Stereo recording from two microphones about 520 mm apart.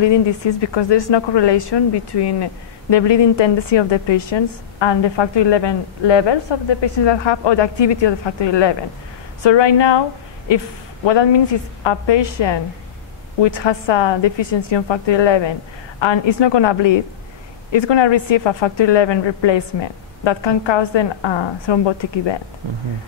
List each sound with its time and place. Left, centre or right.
0.0 s a woman's voice: left
11.1 s a woman's voice: left